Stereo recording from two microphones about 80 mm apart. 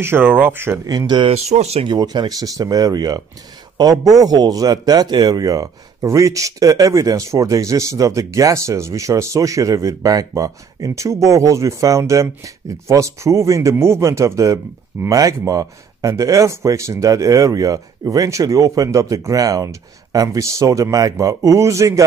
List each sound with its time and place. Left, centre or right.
0.0 s speech: right
0.8 s speech: right
5.4 s speech: right